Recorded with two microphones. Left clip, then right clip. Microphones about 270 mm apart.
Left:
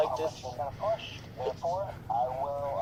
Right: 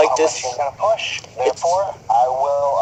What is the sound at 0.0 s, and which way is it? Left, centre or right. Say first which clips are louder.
Speech: right 15 dB; right.